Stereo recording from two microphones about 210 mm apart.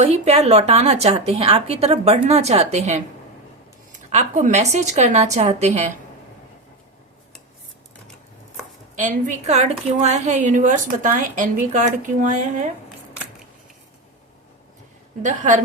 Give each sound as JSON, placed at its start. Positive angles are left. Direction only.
{"t": 0.0, "sound": "a woman's voice", "side_deg": -30}
{"t": 4.1, "sound": "a woman's voice", "side_deg": -35}
{"t": 9.0, "sound": "a woman's voice", "side_deg": -35}
{"t": 15.2, "sound": "a woman's voice", "side_deg": -35}